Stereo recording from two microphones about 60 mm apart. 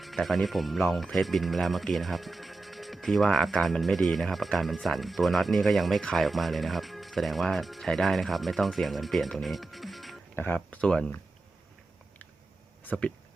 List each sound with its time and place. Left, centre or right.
0.0 s speech: centre
9.4 s music: centre
10.3 s speech: left
10.8 s speech: centre
12.8 s speech: left